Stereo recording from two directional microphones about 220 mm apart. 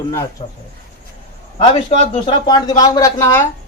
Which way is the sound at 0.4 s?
25° left (ahead or behind).